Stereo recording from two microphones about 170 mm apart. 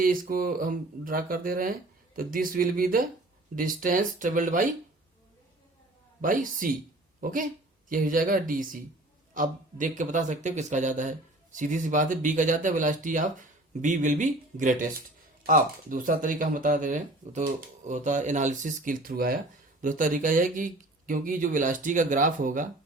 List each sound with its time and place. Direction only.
0.0 s speech: 55° right (ahead or behind)
6.2 s speech: 50° right (ahead or behind)